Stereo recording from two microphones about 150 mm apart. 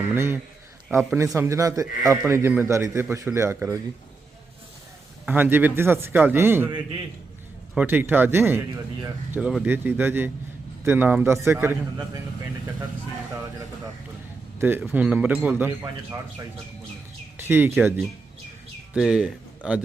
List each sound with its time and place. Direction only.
0.0 s a man's voice: 15° right (ahead or behind)
1.4 s a man's voice: 20° right (ahead or behind)
5.2 s a man's voice: 10° right (ahead or behind)
7.8 s a man's voice: 15° right (ahead or behind)
9.3 s a man's voice: 5° right (ahead or behind)
14.6 s a man's voice: 15° right (ahead or behind)
17.3 s speech: 15° right (ahead or behind)
18.9 s speech: centre (ahead or behind)